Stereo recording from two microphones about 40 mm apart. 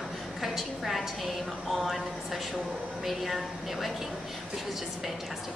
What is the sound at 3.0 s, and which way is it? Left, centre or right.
Speech, centre.